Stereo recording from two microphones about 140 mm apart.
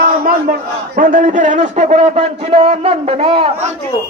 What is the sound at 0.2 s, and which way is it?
A man's voice, 90° right.